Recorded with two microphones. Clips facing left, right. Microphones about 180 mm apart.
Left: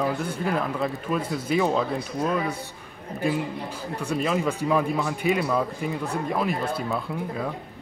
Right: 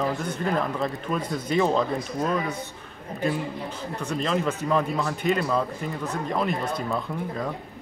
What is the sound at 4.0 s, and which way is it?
Speech, 10° left (ahead or behind).